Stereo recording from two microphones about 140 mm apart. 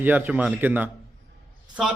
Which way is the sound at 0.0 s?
10° right (ahead or behind).